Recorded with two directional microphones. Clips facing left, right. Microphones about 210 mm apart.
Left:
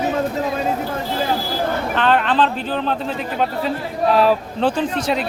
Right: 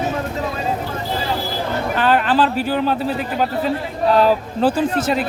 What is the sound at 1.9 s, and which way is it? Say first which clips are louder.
A man's voice: right 2 dB; 5° right (ahead or behind).